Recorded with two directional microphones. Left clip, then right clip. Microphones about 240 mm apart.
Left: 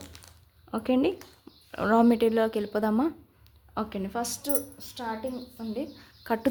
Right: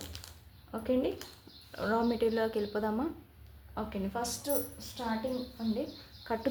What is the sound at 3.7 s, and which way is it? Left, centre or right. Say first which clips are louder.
A woman's voice: left 5 dB; left.